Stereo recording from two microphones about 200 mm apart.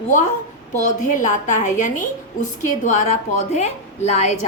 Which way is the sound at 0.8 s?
40° left (ahead or behind).